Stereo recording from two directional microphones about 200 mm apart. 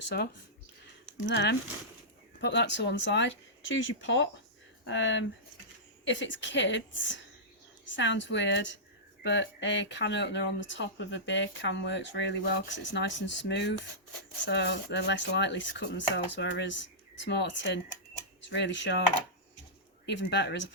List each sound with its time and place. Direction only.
1.3 s speech: 60° left (ahead or behind)
20.1 s speech: 60° left (ahead or behind)